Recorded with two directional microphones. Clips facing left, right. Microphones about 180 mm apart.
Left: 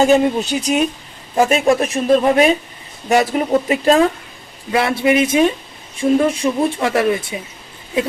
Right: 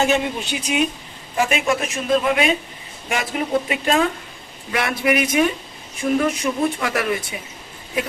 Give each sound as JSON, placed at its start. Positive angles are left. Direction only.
{"t": 0.0, "sound": "a man's voice", "side_deg": 40}